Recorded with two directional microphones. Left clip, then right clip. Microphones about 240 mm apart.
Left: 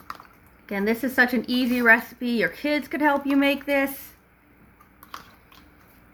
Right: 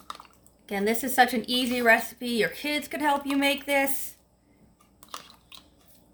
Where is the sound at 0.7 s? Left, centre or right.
Right.